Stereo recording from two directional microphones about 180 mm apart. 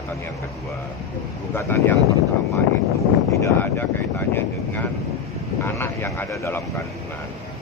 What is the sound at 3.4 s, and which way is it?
Speech, 10° left (ahead or behind).